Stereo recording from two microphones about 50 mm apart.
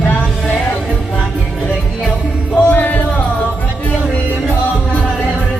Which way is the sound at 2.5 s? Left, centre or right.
Left.